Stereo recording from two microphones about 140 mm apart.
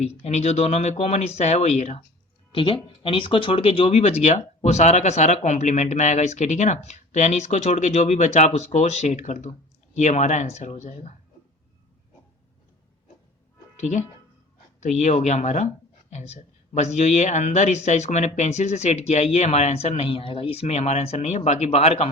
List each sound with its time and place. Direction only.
0.2 s speech: 50° left (ahead or behind)
2.5 s speech: 40° left (ahead or behind); by 11.1 s 55° left (ahead or behind)
13.7 s speech: 55° left (ahead or behind)